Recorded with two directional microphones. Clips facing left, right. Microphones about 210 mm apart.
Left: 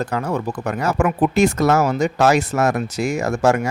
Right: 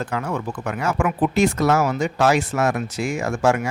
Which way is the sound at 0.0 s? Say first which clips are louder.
Left 3 dB; 40° left (ahead or behind).